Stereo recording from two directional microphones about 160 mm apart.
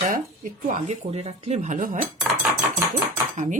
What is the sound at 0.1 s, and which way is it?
Speech, 55° right (ahead or behind).